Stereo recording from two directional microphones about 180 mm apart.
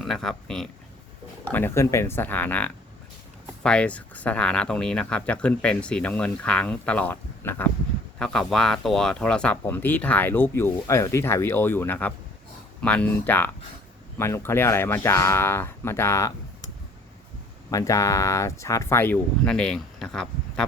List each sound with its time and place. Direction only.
0.0 s speech: centre (ahead or behind)
17.7 s speech: 15° left (ahead or behind)